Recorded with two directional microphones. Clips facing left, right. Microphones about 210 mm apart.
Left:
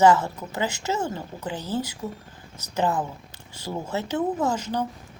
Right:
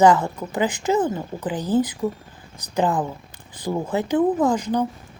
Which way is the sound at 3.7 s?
50° right (ahead or behind).